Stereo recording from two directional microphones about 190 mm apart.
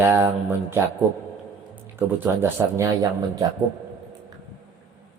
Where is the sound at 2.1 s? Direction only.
10° right (ahead or behind).